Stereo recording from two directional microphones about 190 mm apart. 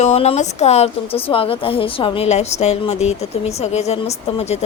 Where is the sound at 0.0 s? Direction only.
35° left (ahead or behind).